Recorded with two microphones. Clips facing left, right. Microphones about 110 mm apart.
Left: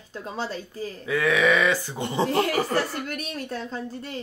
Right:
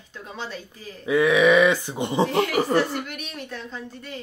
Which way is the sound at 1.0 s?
20° right (ahead or behind).